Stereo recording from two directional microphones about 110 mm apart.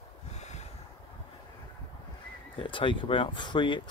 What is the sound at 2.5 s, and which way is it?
Speech, 50° left (ahead or behind).